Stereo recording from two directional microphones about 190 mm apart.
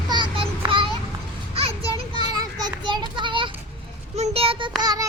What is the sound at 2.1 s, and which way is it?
Children playing, 20° right (ahead or behind).